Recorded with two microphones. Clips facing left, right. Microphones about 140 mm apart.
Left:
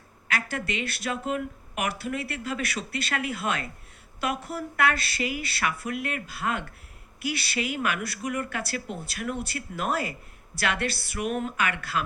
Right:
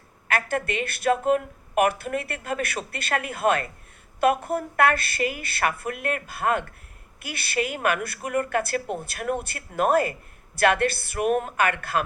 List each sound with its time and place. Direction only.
0.3 s a woman's voice: 50° right (ahead or behind)